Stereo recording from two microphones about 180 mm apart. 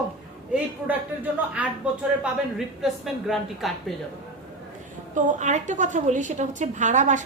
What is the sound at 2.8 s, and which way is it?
Speech, centre (ahead or behind).